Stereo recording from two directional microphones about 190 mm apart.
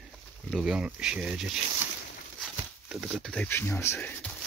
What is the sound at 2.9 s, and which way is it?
Speech, centre (ahead or behind).